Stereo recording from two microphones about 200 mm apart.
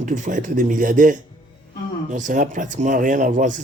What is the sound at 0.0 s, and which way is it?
A man's voice, 40° right (ahead or behind).